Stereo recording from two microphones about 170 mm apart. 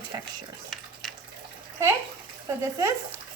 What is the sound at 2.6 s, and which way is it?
Speech, 15° right (ahead or behind).